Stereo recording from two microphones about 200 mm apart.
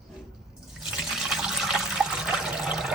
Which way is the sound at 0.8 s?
5° right (ahead or behind).